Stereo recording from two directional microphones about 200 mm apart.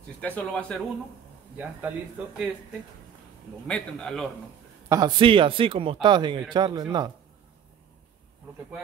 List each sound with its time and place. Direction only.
0.2 s a man's voice: 5° left (ahead or behind)
1.6 s speech: 5° right (ahead or behind)
3.6 s a man's voice: 5° left (ahead or behind)
4.8 s speech: 20° right (ahead or behind)